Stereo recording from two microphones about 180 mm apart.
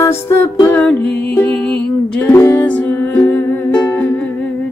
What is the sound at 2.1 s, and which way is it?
Music, 10° left (ahead or behind).